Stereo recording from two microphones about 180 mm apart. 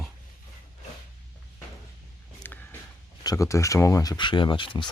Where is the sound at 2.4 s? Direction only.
10° left (ahead or behind).